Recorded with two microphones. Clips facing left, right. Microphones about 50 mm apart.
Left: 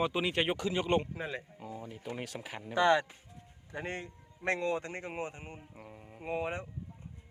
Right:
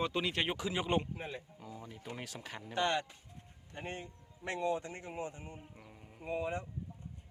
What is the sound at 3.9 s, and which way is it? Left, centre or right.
Speech, left.